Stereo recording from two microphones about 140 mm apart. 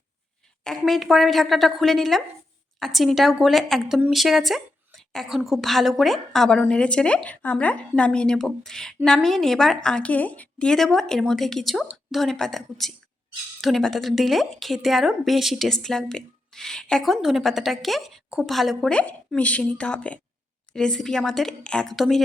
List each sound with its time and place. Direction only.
0.6 s speech: 5° left (ahead or behind)